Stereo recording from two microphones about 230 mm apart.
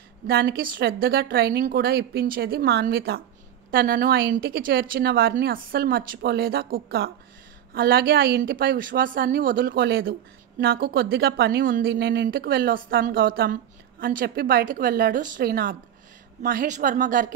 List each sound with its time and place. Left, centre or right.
0.3 s speech: right